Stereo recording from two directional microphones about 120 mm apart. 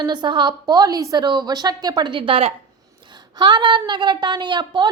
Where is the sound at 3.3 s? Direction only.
40° right (ahead or behind).